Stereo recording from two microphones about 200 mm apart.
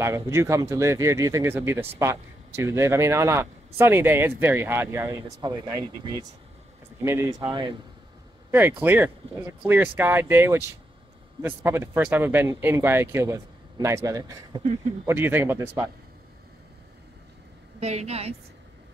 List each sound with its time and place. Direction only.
0.0 s speech: 15° right (ahead or behind)
8.5 s speech: 10° right (ahead or behind)
17.7 s a woman's voice: 35° right (ahead or behind)